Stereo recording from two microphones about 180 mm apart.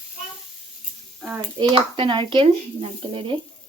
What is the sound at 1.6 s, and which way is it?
Speech, 30° right (ahead or behind).